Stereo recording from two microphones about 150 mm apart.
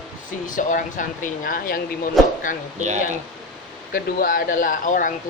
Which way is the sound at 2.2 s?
Centre (ahead or behind).